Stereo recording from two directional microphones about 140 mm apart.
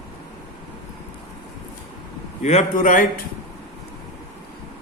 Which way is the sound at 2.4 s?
55° left (ahead or behind).